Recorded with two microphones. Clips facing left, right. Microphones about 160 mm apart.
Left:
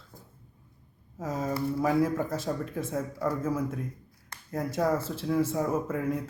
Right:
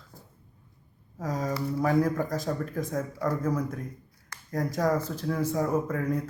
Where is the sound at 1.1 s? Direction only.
5° left (ahead or behind).